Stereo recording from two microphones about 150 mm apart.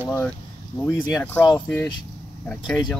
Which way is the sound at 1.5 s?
15° left (ahead or behind).